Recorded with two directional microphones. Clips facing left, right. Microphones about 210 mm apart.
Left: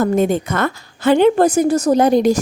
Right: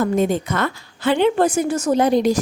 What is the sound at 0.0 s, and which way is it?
A woman's voice, 50° left (ahead or behind).